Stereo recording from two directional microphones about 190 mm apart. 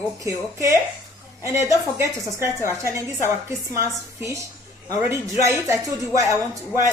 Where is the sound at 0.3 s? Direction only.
15° right (ahead or behind).